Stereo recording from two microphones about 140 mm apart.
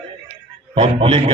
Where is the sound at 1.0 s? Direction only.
45° right (ahead or behind).